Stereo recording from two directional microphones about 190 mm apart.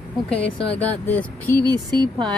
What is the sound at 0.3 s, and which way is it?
Speech, 5° left (ahead or behind).